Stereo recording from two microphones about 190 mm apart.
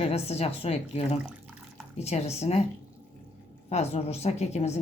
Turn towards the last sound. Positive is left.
turn(degrees=35)  # may be behind; listen again after turning